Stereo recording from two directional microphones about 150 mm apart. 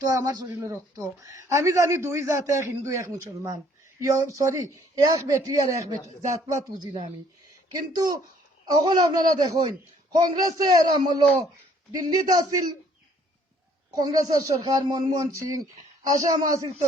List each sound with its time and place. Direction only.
0.0 s a man's voice: 20° right (ahead or behind)
6.8 s speech: 30° right (ahead or behind)
8.6 s a man's voice: 30° right (ahead or behind)
13.9 s a man's voice: 25° right (ahead or behind)